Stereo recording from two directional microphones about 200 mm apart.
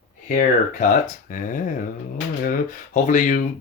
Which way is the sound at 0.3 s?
40° left (ahead or behind).